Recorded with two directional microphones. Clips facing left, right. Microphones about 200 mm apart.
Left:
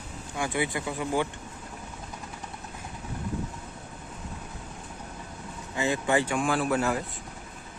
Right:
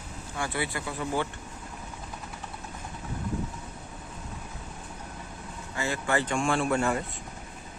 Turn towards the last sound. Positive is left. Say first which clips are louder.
# even
turn(degrees=0)  # may be behind; listen again after turning